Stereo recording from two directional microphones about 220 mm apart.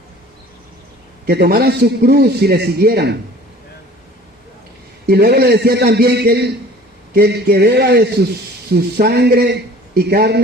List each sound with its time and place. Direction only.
1.3 s a man's voice: 45° right (ahead or behind)
5.0 s a man's voice: 45° right (ahead or behind)